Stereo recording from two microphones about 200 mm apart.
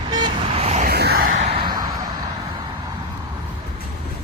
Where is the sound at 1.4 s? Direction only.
25° right (ahead or behind).